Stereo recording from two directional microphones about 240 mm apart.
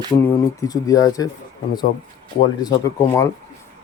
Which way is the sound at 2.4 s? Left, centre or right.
Centre.